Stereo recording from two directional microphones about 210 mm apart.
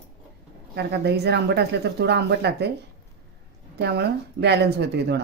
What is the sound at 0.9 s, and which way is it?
Speech, 50° right (ahead or behind).